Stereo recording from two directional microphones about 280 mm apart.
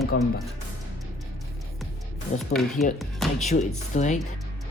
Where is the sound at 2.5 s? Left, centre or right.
Centre.